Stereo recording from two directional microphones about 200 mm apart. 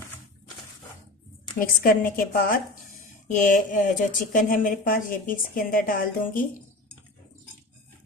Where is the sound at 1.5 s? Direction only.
45° left (ahead or behind).